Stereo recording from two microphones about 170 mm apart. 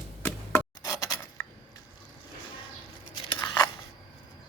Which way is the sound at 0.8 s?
20° left (ahead or behind).